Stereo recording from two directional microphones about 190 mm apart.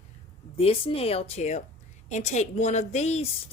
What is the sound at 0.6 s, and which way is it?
A woman's voice, 30° left (ahead or behind).